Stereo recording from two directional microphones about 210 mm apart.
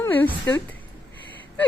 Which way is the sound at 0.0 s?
10° left (ahead or behind).